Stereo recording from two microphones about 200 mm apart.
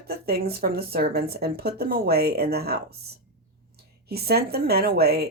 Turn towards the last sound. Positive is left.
turn(degrees=-50)  # may be behind; listen again after turning